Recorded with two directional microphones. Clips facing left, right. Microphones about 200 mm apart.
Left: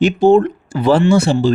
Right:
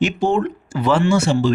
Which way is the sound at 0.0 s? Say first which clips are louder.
Left 8 dB; 35° left (ahead or behind).